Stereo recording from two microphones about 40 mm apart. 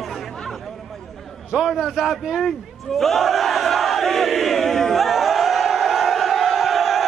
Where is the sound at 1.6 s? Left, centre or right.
Centre.